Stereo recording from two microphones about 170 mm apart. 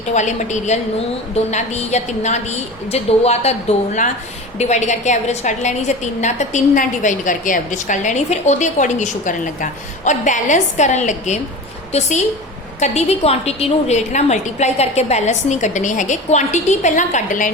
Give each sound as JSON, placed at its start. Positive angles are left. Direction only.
{"t": 0.1, "sound": "a woman's voice", "side_deg": 45}